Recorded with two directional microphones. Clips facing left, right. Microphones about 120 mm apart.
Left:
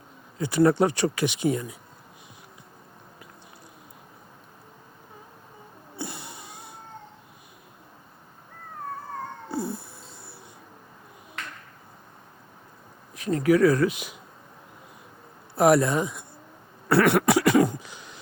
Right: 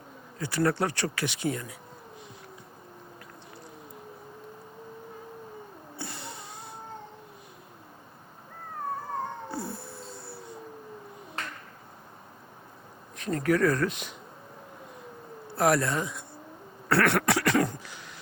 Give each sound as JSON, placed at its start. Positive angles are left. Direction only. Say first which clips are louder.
{"t": 0.3, "sound": "speech", "louder": "left 7 dB", "side_deg": 20}
{"t": 6.0, "sound": "a sound", "louder": "left 3 dB", "side_deg": 15}
{"t": 9.5, "sound": "cat", "louder": "left 5 dB", "side_deg": 15}
{"t": 13.1, "sound": "speech", "louder": "left 5 dB", "side_deg": 5}
{"t": 15.5, "sound": "speech", "louder": "left 5 dB", "side_deg": 15}
{"t": 16.9, "sound": "a sound", "louder": "left 5 dB", "side_deg": 10}